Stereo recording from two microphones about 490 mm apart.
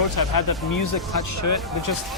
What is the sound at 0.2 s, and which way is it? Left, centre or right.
Speech, left.